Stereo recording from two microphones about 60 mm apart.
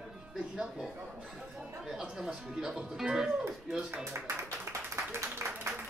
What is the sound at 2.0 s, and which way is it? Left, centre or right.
Speech, centre.